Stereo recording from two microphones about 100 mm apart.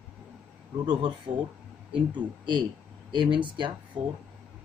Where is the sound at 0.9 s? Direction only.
55° right (ahead or behind).